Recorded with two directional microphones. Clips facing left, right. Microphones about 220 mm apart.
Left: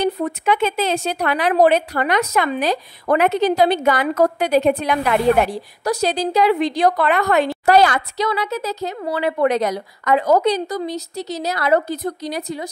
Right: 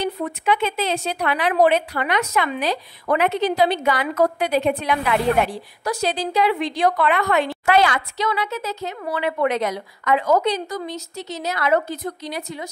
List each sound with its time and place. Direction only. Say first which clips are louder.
0.0 s a woman's voice: left 4 dB; 45° left (ahead or behind)